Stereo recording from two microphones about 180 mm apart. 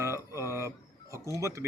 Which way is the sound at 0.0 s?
15° right (ahead or behind).